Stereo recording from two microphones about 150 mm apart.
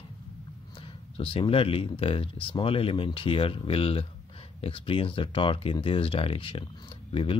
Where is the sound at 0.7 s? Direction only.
35° left (ahead or behind).